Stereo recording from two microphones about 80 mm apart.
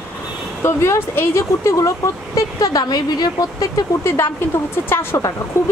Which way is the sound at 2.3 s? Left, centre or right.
Left.